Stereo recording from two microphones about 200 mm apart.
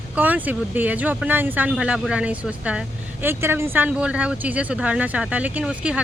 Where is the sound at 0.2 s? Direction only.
10° right (ahead or behind).